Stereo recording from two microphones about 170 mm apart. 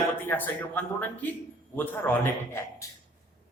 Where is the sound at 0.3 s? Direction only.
10° left (ahead or behind).